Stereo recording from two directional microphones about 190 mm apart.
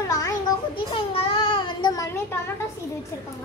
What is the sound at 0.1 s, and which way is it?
Child singing, 20° left (ahead or behind).